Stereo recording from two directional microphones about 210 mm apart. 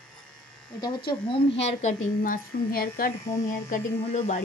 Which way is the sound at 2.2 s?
45° left (ahead or behind).